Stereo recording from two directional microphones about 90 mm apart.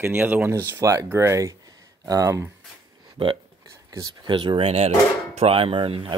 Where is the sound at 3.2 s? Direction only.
90° right.